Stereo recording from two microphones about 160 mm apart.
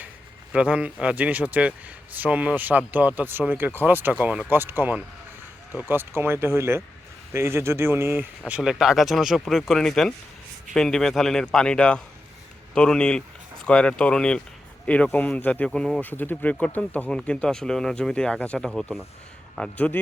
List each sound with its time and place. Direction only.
0.5 s speech: 5° right (ahead or behind); by 20.0 s 10° left (ahead or behind)